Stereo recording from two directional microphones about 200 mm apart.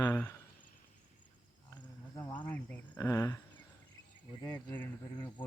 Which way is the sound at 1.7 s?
20° left (ahead or behind).